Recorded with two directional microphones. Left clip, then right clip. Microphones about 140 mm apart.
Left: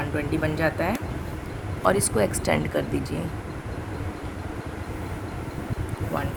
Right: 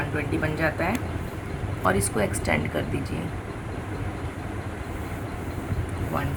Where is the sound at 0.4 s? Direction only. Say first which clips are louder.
Left 1 dB; 90° left.